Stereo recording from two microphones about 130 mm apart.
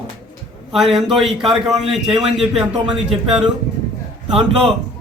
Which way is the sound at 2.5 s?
45° right (ahead or behind).